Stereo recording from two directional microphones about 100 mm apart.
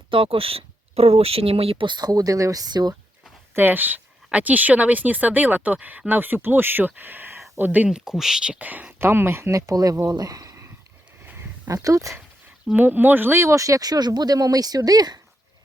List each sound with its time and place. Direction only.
0.1 s speech: 65° right (ahead or behind); by 2.9 s 45° right (ahead or behind)
3.5 s a woman's voice: 20° right (ahead or behind)
10.2 s a sound: 40° right (ahead or behind)
11.3 s a sound: 20° right (ahead or behind)
11.7 s speech: 35° right (ahead or behind)
12.7 s speech: 20° right (ahead or behind); by 15.2 s 40° right (ahead or behind)